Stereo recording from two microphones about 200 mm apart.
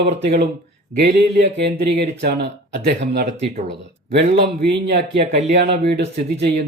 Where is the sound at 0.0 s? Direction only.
55° right (ahead or behind).